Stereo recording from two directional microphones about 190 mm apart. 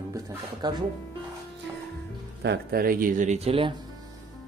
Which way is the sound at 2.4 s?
55° right (ahead or behind).